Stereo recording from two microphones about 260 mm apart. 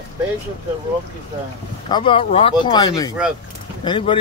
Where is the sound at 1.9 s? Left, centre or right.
Centre.